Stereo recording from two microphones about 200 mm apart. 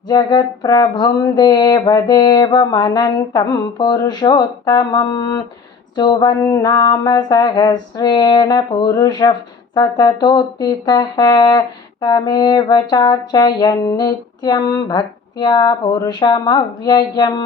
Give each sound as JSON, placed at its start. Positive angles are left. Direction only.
{"t": 0.1, "sound": "speech", "side_deg": 20}